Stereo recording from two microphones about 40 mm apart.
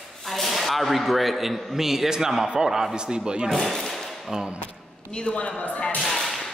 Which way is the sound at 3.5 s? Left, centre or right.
Centre.